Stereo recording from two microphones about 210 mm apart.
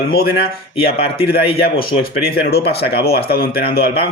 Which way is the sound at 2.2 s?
50° left (ahead or behind).